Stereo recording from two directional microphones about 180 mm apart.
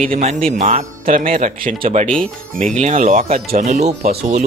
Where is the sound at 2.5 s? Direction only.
45° right (ahead or behind).